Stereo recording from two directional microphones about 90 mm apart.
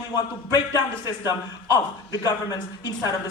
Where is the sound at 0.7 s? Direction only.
50° left (ahead or behind).